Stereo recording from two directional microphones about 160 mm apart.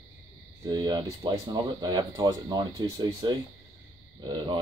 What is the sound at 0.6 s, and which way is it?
Speech, 25° right (ahead or behind).